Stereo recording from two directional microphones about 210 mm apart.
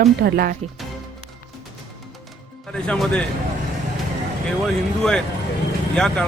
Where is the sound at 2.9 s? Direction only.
5° left (ahead or behind).